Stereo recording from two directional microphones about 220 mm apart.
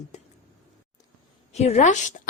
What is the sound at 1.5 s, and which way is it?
Speech, 30° left (ahead or behind).